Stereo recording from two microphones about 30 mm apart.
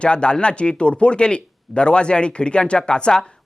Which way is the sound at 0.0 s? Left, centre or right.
Left.